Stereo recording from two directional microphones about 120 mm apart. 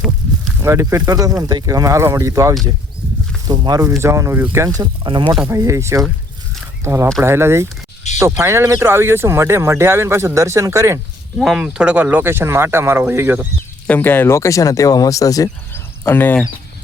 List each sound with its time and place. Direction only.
0.6 s speech: 25° right (ahead or behind)
4.8 s speech: 45° right (ahead or behind)
5.5 s speech: 25° right (ahead or behind)
11.4 s speech: centre (ahead or behind)
13.8 s speech: 15° left (ahead or behind); by 15.4 s 30° left (ahead or behind)
15.7 s cricket: 15° left (ahead or behind)